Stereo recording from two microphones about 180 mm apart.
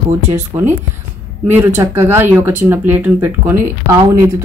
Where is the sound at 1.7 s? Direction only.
15° right (ahead or behind).